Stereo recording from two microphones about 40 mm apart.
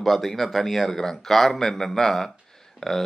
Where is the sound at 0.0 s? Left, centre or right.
Centre.